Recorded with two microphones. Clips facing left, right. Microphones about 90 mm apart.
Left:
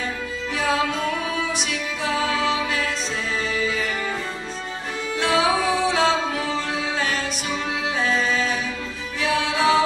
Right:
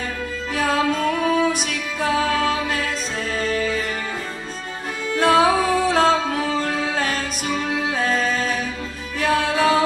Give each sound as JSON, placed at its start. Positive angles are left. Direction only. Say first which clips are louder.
{"t": 0.5, "sound": "music", "louder": "right 2 dB", "side_deg": -45}
{"t": 5.1, "sound": "music", "louder": "right 5 dB", "side_deg": -45}